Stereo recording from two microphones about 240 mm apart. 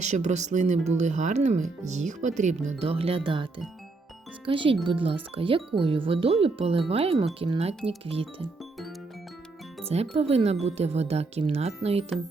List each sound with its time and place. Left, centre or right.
0.0 s speech: right
10.2 s speech: right